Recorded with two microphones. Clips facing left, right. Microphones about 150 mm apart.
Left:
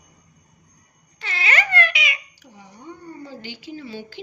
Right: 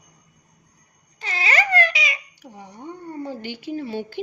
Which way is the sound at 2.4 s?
55° right (ahead or behind).